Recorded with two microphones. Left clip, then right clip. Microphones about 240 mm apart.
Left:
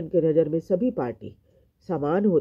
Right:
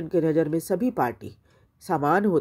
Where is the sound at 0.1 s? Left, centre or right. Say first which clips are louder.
Left 2 dB; right.